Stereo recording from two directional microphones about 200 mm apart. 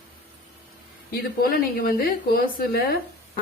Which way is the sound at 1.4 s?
50° left (ahead or behind).